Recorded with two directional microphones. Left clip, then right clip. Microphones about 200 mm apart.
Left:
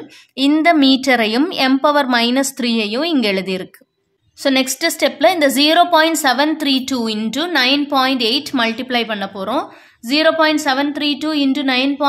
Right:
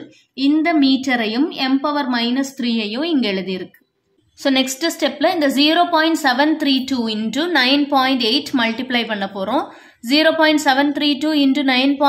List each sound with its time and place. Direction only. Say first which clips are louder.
0.4 s a woman's voice: left 3 dB; 30° left (ahead or behind)
4.4 s a woman's voice: left 2 dB; 15° left (ahead or behind)